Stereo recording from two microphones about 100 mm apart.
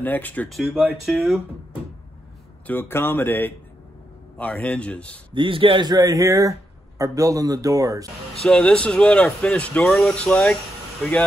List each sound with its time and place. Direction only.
0.0 s speech: 15° left (ahead or behind)
0.5 s speech: centre (ahead or behind)
2.6 s speech: 20° left (ahead or behind)
5.3 s a man's voice: 60° right (ahead or behind)
5.9 s a man's voice: 40° right (ahead or behind)
8.5 s speech: 10° left (ahead or behind)